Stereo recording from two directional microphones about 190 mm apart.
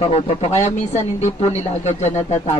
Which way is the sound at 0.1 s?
35° left (ahead or behind).